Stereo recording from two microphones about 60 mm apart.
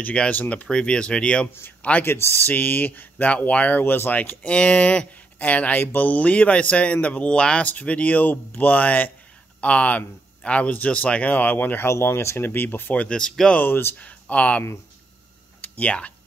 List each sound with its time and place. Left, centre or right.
0.0 s speech: centre
0.3 s speech: left
4.6 s speech: centre; by 11.9 s left
11.9 s speech: left
12.9 s speech: centre
13.6 s speech: left
14.3 s speech: left
15.6 s speech: left